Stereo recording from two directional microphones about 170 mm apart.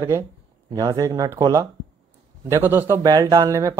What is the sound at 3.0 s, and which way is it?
Speech, 25° right (ahead or behind).